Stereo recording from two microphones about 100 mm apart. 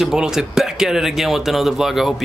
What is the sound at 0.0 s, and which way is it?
Speech, 5° right (ahead or behind).